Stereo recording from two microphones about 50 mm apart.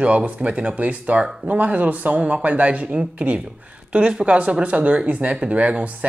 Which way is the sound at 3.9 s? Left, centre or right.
Centre.